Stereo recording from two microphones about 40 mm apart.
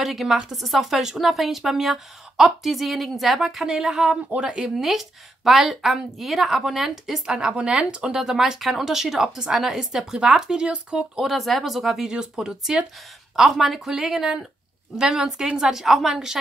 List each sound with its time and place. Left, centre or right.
0.0 s a woman's voice: centre
3.4 s speech: centre
4.4 s speech: right
4.7 s a woman's voice: centre
7.2 s speech: centre
8.2 s speech: centre
11.1 s a woman's voice: centre
12.1 s speech: centre
13.4 s speech: centre
15.8 s a woman's voice: centre